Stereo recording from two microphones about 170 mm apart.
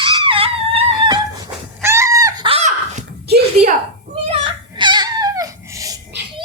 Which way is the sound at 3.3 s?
70° right (ahead or behind).